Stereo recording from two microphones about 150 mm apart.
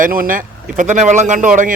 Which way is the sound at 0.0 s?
70° right (ahead or behind).